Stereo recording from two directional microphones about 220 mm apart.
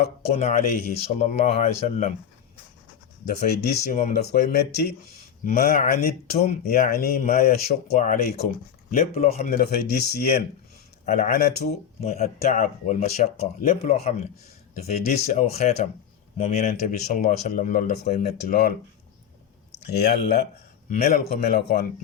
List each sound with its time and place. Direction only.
0.3 s speech: 35° left (ahead or behind)
3.2 s speech: 45° left (ahead or behind)
9.5 s speech: 45° left (ahead or behind)
20.0 s speech: 50° left (ahead or behind)